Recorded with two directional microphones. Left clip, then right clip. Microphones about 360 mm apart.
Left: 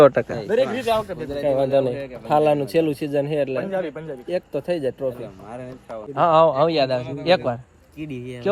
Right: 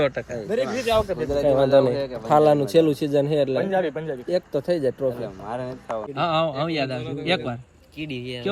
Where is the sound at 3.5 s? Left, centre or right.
Right.